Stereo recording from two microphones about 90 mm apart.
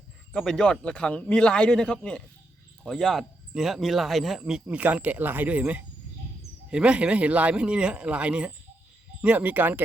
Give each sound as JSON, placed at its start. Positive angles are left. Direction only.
{"t": 0.3, "sound": "speech", "side_deg": 10}
{"t": 4.6, "sound": "speech", "side_deg": -15}